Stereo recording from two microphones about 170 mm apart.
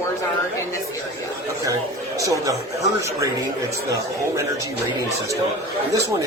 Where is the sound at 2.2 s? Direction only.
20° right (ahead or behind).